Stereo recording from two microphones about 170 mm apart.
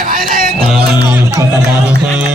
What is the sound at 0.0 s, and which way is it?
Music, 55° right (ahead or behind).